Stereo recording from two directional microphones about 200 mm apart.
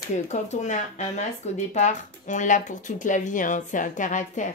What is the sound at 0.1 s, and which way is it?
Speech, 35° left (ahead or behind).